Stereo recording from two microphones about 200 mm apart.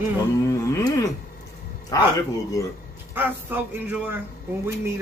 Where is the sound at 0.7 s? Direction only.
15° left (ahead or behind).